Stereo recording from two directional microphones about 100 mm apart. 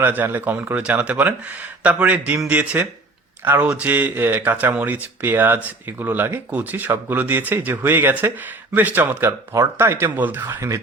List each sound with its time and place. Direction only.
0.0 s speech: 20° right (ahead or behind)